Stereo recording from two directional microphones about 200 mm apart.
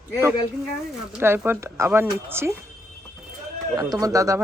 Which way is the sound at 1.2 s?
10° right (ahead or behind).